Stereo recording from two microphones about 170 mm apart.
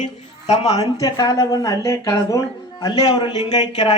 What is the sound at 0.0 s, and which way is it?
Speech, 40° left (ahead or behind).